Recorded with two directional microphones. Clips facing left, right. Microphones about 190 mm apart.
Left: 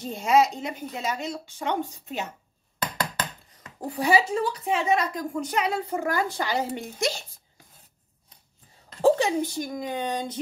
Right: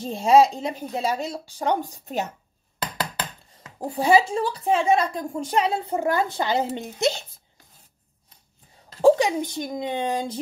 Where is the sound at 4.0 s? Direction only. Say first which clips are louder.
Right 3 dB; 30° right (ahead or behind).